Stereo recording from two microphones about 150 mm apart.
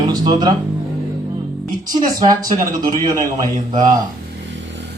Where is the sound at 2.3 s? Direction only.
25° right (ahead or behind).